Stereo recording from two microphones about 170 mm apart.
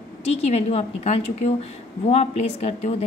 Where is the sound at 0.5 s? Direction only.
40° left (ahead or behind).